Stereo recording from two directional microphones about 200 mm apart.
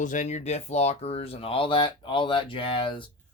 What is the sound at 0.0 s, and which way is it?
Speech, 40° left (ahead or behind).